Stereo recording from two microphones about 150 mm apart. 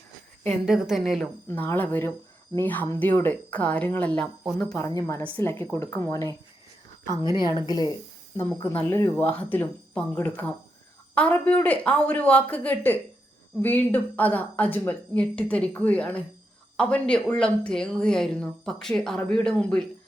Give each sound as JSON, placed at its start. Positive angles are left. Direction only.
{"t": 0.6, "sound": "speech", "side_deg": -5}
{"t": 1.5, "sound": "a woman's voice", "side_deg": 10}
{"t": 8.4, "sound": "speech", "side_deg": 10}